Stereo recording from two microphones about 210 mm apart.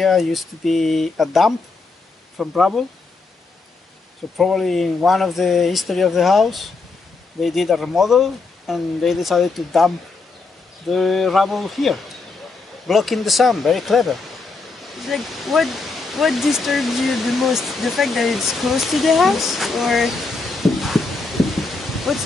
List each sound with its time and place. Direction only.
0.0 s speech: centre (ahead or behind)
4.4 s speech: centre (ahead or behind)